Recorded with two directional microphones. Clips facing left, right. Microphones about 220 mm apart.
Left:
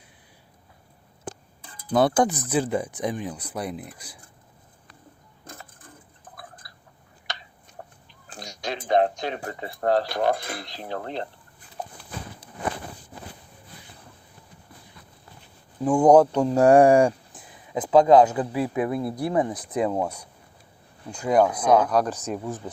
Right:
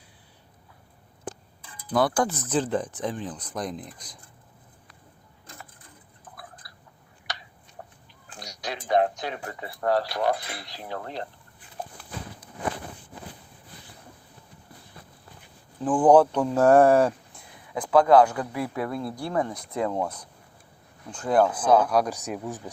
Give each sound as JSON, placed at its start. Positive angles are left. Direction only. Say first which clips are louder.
{"t": 1.9, "sound": "speech", "louder": "left 3 dB", "side_deg": 25}
{"t": 8.4, "sound": "speech", "louder": "left 3 dB", "side_deg": 25}
{"t": 10.3, "sound": "cutlery", "louder": "left 3 dB", "side_deg": 45}
{"t": 10.7, "sound": "speech", "louder": "left 2 dB", "side_deg": 25}
{"t": 15.8, "sound": "speech", "louder": "left 2 dB", "side_deg": 10}
{"t": 21.8, "sound": "speech", "louder": "left 1 dB", "side_deg": -10}
{"t": 22.4, "sound": "speech", "louder": "left 2 dB", "side_deg": 0}